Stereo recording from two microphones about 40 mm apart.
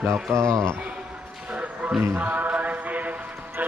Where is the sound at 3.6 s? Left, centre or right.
Right.